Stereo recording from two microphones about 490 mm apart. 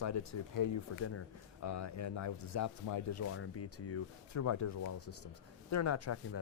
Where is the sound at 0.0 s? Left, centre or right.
Left.